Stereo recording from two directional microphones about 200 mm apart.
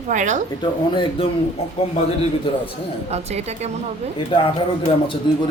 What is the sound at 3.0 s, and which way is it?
Speech, 35° right (ahead or behind).